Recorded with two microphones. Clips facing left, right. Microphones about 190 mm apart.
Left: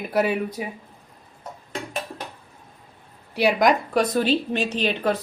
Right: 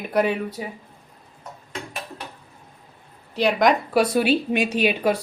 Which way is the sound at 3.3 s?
5° left (ahead or behind).